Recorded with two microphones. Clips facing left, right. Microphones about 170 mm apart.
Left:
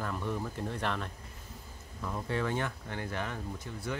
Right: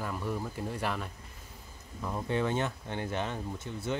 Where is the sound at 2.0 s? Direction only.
20° right (ahead or behind).